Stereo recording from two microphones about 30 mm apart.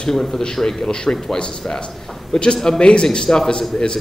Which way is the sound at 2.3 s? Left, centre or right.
Left.